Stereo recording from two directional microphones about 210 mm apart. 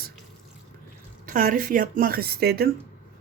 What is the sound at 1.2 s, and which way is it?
Speech, 40° right (ahead or behind).